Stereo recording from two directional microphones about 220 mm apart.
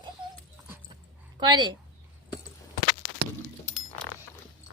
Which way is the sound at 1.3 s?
20° right (ahead or behind).